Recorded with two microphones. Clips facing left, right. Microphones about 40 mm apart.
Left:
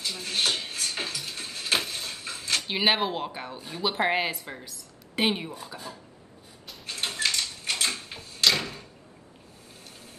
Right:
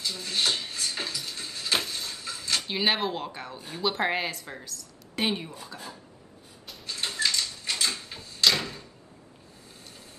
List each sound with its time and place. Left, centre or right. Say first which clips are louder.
0.0 s a sound: even; left
2.7 s speech: left 2 dB; centre
6.9 s typewriter: even; left
9.8 s vehicle: left 1 dB; left